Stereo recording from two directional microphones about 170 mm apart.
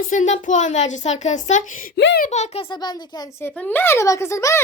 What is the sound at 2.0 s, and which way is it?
Speech, 90° left.